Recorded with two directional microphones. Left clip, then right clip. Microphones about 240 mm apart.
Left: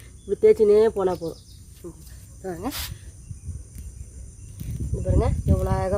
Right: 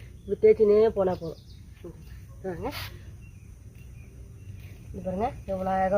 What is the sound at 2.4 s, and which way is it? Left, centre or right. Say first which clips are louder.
Speech: left 2 dB; left.